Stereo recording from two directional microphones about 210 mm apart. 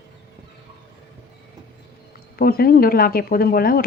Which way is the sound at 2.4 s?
45° left (ahead or behind).